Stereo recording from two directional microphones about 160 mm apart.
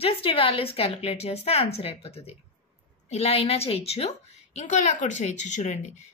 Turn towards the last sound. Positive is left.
turn(degrees=45)  # may be behind; listen again after turning